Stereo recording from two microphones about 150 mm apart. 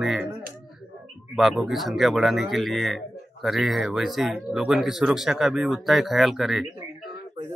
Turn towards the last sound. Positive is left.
turn(degrees=0)  # may be behind; listen again after turning